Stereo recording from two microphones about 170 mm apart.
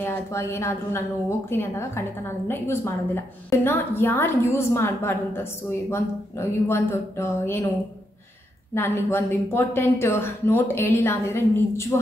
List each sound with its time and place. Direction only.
0.0 s a woman's voice: 15° left (ahead or behind)
8.7 s a woman's voice: 15° left (ahead or behind)